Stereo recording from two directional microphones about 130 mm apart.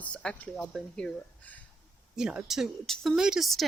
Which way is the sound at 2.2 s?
5° right (ahead or behind).